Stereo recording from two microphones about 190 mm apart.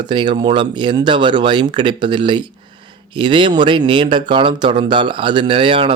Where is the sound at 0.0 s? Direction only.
25° right (ahead or behind).